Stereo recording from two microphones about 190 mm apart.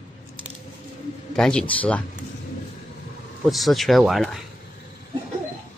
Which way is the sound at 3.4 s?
Centre (ahead or behind).